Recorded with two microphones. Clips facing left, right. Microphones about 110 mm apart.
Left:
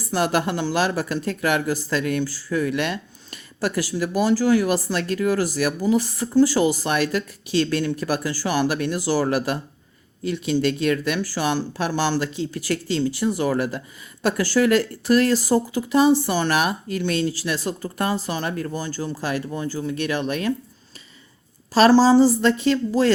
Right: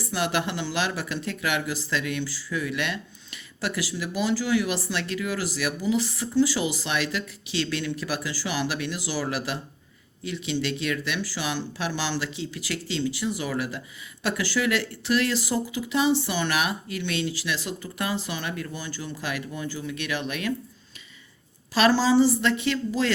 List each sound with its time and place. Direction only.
0.1 s speech: 45° left (ahead or behind)
21.8 s a woman's voice: 40° left (ahead or behind)